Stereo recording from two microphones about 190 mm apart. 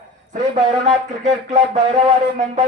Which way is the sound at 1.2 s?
40° right (ahead or behind).